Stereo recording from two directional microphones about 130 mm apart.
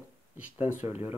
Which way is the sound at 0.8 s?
20° right (ahead or behind).